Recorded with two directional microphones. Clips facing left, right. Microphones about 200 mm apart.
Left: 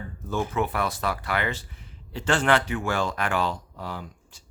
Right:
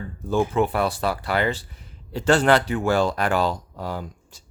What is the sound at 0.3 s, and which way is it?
Speech, 30° right (ahead or behind).